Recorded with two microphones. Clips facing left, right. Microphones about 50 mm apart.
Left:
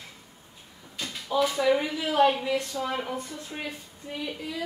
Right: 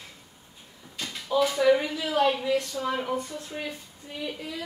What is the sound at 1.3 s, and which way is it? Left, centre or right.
Speech, centre.